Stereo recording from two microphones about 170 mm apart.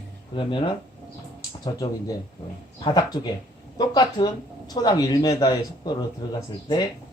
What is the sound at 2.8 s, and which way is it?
A man's voice, 25° left (ahead or behind).